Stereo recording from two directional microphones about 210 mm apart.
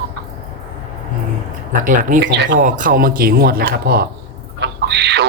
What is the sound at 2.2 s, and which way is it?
Speech, 55° right (ahead or behind).